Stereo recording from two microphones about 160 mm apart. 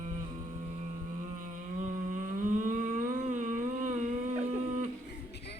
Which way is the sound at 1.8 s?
50° right (ahead or behind).